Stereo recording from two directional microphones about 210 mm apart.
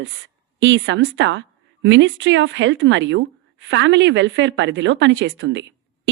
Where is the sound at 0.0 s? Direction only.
60° right (ahead or behind).